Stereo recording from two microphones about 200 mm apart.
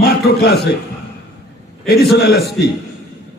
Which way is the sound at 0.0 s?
55° left (ahead or behind).